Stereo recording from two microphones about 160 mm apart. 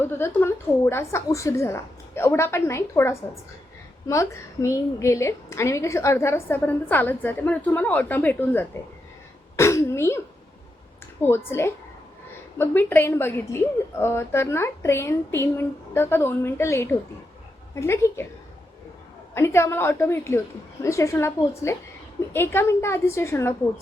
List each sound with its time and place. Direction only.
0.0 s a woman's voice: 15° left (ahead or behind)
11.2 s a woman's voice: 15° left (ahead or behind)
19.3 s a woman's voice: 15° left (ahead or behind)